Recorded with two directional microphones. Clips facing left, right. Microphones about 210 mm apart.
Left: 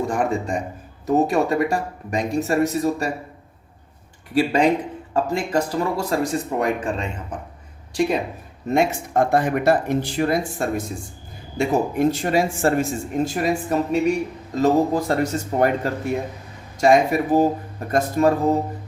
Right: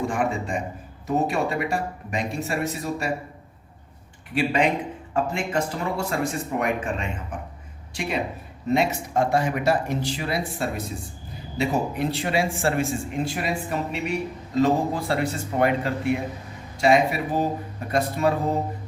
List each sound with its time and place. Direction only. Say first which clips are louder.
0.1 s speech: left 3 dB; 40° left (ahead or behind)
4.4 s speech: left 4 dB; 40° left (ahead or behind)
8.7 s speech: left 3 dB; 50° left (ahead or behind)